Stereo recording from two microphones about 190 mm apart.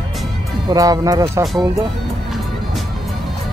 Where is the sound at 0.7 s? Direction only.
20° right (ahead or behind).